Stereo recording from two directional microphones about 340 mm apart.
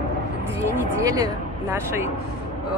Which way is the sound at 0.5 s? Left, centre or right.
Centre.